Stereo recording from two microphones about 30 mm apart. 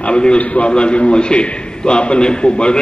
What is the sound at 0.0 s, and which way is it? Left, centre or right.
A man's voice, left.